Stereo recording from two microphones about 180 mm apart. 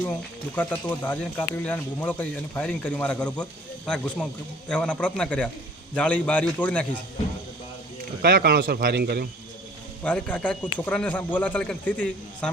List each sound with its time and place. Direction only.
0.5 s speech: 10° left (ahead or behind)
8.2 s a man's voice: 65° right (ahead or behind)
10.0 s speech: 5° left (ahead or behind)